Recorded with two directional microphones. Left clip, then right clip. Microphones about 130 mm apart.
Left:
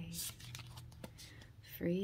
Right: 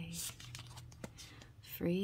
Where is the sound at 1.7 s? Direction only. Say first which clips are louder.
Right 1 dB; 35° right (ahead or behind).